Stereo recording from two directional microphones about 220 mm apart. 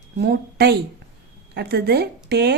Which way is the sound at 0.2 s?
45° right (ahead or behind).